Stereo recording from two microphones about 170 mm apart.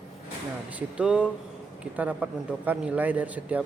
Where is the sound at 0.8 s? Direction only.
5° right (ahead or behind).